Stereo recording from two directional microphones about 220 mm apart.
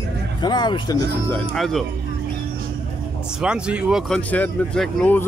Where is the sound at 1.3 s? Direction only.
Centre (ahead or behind).